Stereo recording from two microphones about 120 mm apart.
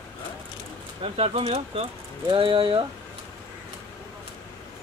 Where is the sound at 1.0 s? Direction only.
50° right (ahead or behind).